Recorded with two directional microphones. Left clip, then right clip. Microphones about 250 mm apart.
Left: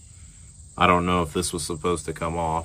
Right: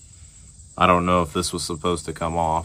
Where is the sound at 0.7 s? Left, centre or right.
Right.